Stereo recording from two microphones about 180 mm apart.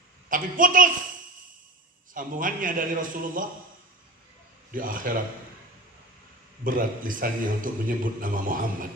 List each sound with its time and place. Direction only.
0.3 s a man's voice: 50° right (ahead or behind)
2.1 s a man's voice: 50° right (ahead or behind)
4.7 s a man's voice: 50° right (ahead or behind)
6.7 s a man's voice: 50° right (ahead or behind)